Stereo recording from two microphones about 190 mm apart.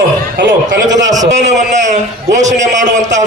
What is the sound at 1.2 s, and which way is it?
A man's voice, 40° right (ahead or behind).